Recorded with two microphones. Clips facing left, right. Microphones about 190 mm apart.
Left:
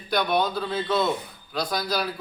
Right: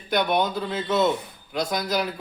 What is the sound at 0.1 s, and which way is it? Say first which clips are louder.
A man's voice: right 1 dB; 20° right (ahead or behind).